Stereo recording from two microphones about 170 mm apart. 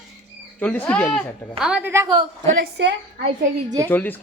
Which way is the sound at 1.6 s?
10° right (ahead or behind).